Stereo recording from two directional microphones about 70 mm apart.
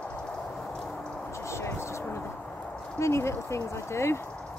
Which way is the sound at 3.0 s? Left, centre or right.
Left.